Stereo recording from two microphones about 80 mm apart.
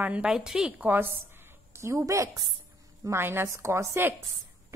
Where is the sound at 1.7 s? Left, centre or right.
Right.